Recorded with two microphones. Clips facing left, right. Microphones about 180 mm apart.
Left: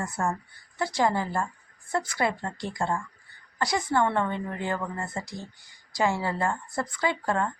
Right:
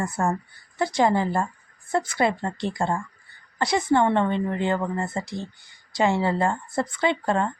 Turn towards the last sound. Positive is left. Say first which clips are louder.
# right 4 dB
turn(degrees=-25)  # may be behind; listen again after turning